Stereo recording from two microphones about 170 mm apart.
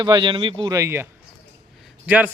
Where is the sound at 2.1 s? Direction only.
10° right (ahead or behind).